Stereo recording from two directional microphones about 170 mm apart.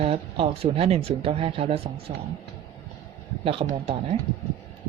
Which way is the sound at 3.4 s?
35° right (ahead or behind).